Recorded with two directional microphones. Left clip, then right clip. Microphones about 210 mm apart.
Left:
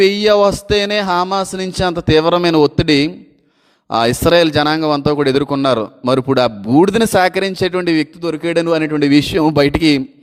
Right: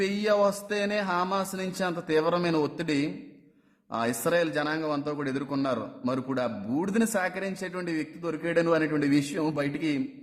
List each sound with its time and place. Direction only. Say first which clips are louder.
0.0 s a man's voice: left 14 dB; 35° left (ahead or behind)